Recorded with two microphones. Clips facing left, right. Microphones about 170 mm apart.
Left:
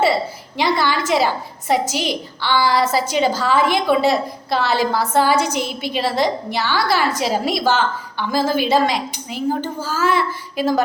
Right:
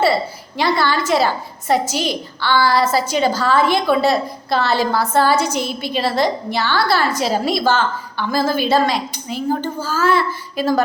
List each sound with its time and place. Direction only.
0.5 s a woman's voice: 15° left (ahead or behind)